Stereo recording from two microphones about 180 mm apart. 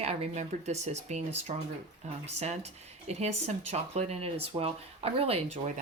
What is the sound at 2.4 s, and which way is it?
Speech, 40° right (ahead or behind).